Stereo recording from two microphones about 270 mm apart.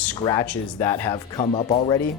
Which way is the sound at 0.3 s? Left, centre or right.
Centre.